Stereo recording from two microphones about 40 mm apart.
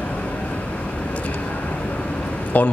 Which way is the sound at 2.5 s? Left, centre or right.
Left.